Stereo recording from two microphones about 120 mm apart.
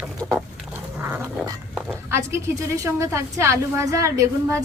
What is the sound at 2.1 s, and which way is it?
A woman's voice, 25° right (ahead or behind).